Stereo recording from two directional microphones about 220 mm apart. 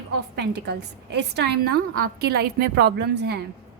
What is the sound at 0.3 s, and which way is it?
A woman's voice, 50° right (ahead or behind).